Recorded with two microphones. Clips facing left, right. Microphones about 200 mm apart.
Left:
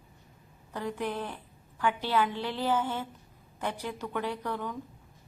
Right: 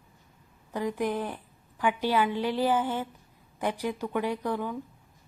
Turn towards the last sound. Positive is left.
turn(degrees=-10)  # may be behind; listen again after turning